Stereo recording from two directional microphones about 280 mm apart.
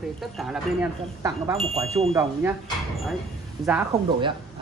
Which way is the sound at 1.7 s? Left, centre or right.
Right.